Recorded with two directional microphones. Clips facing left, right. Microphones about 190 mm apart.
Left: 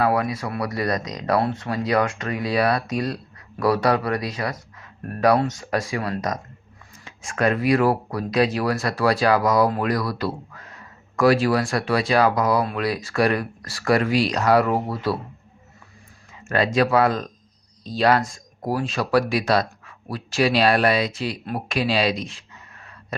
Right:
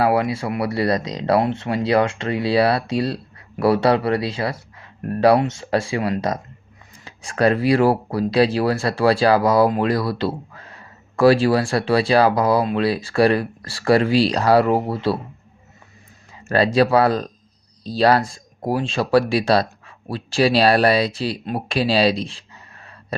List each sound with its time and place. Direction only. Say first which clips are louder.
0.0 s speech: right 3 dB; 30° right (ahead or behind)
16.4 s a sound: right 4 dB; 35° right (ahead or behind)
16.7 s speech: right 2 dB; 35° right (ahead or behind)